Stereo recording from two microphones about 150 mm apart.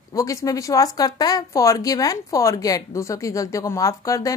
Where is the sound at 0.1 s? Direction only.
20° left (ahead or behind).